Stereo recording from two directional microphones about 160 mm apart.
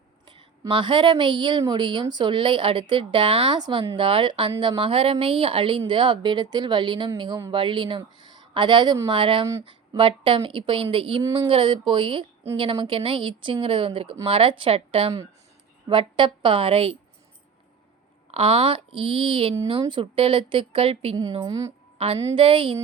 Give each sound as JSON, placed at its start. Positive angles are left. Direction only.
{"t": 0.6, "sound": "a woman's voice", "side_deg": -30}
{"t": 18.3, "sound": "a woman's voice", "side_deg": -40}
{"t": 21.4, "sound": "speech", "side_deg": -25}
{"t": 21.9, "sound": "a woman's voice", "side_deg": -35}